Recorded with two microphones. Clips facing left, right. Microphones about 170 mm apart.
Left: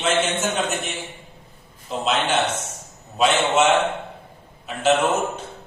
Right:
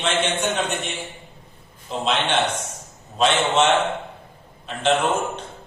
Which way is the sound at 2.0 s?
5° left (ahead or behind).